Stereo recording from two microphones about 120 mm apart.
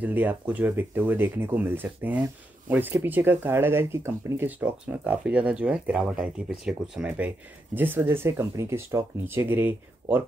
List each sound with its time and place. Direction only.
0.0 s speech: 15° right (ahead or behind)